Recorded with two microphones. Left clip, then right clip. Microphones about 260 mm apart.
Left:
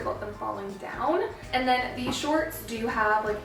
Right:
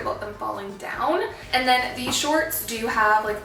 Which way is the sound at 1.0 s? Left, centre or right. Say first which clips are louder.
Right 3 dB; centre.